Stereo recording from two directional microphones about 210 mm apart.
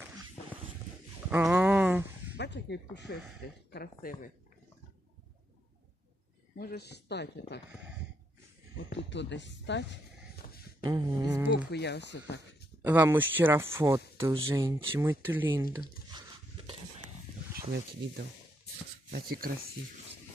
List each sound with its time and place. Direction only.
1.3 s a sound: 5° right (ahead or behind)
2.3 s speech: 55° left (ahead or behind)
3.7 s speech: 45° left (ahead or behind)
6.6 s speech: 50° left (ahead or behind)
8.9 s speech: 55° left (ahead or behind)
10.9 s speech: 15° right (ahead or behind)
11.7 s speech: 55° left (ahead or behind)
12.8 s speech: 10° right (ahead or behind)
14.6 s speech: 25° right (ahead or behind)
14.9 s speech: 10° right (ahead or behind)
16.1 s a sound: 20° right (ahead or behind)
17.6 s speech: 50° right (ahead or behind)